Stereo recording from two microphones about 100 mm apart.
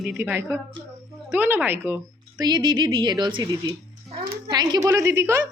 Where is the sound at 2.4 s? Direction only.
45° right (ahead or behind).